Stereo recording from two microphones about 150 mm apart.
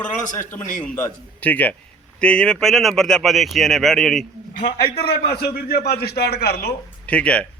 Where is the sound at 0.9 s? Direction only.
15° left (ahead or behind).